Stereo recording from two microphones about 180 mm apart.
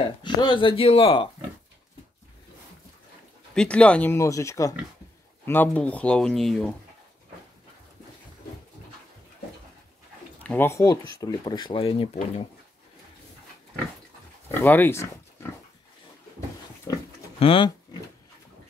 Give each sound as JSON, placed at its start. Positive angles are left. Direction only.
{"t": 0.2, "sound": "speech", "side_deg": 25}
{"t": 3.5, "sound": "speech", "side_deg": 5}
{"t": 10.4, "sound": "speech", "side_deg": 10}
{"t": 14.5, "sound": "speech", "side_deg": 10}
{"t": 16.9, "sound": "speech", "side_deg": 20}
{"t": 17.4, "sound": "speech", "side_deg": 30}